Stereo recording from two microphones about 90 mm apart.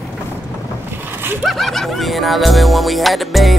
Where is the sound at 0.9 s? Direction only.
25° right (ahead or behind).